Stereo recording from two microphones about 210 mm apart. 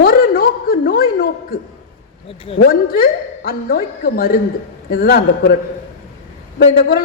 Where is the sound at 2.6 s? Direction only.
45° left (ahead or behind).